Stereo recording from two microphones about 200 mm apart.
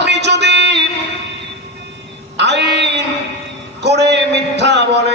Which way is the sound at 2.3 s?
60° right (ahead or behind).